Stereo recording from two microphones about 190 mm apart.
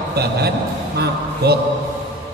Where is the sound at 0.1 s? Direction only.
55° right (ahead or behind).